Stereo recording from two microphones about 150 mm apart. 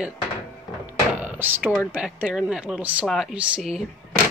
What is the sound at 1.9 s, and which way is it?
Speech, 10° right (ahead or behind).